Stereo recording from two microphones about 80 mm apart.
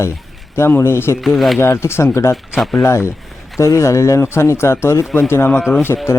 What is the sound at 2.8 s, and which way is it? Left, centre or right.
Speech, left.